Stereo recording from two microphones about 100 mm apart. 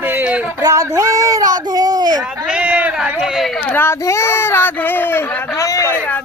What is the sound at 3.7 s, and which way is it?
Speech, 25° left (ahead or behind).